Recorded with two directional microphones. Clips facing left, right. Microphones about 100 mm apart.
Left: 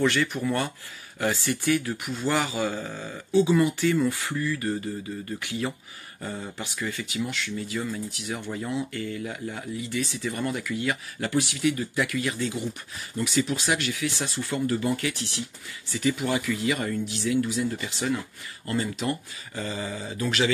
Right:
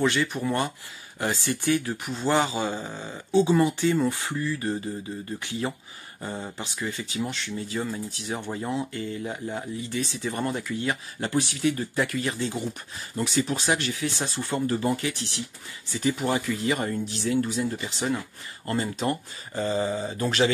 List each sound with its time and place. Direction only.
0.0 s speech: 20° right (ahead or behind); by 20.5 s 35° right (ahead or behind)